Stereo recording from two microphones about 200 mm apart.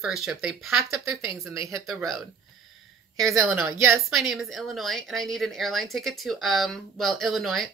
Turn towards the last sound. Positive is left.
turn(degrees=0)  # may be behind; listen again after turning